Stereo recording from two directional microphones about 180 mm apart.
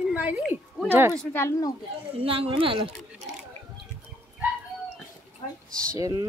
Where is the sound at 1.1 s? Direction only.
15° left (ahead or behind).